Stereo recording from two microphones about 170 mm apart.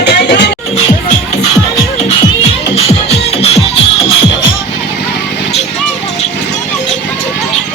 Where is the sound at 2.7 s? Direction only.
35° left (ahead or behind).